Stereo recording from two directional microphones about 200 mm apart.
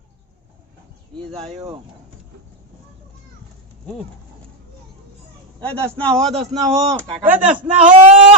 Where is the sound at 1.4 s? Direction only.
30° right (ahead or behind).